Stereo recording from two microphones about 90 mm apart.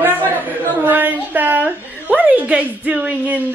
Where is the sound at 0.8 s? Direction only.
20° right (ahead or behind).